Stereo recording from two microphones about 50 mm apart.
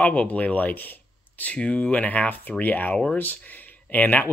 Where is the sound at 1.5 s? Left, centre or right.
Left.